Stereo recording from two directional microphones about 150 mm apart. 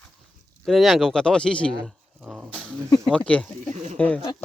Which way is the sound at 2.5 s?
5° left (ahead or behind).